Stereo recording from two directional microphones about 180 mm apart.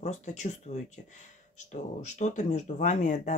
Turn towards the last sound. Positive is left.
turn(degrees=40)  # may be behind; listen again after turning